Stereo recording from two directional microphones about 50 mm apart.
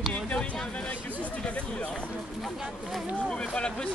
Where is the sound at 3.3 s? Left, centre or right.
Centre.